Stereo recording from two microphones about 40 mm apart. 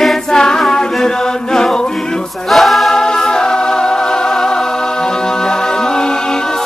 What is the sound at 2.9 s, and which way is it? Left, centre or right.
Music, centre.